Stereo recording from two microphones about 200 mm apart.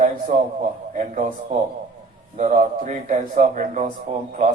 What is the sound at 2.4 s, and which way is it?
A man's voice, 40° right (ahead or behind).